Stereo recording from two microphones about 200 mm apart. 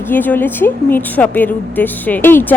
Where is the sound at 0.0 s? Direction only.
10° left (ahead or behind).